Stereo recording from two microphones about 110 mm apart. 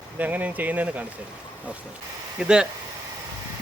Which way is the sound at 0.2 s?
15° right (ahead or behind).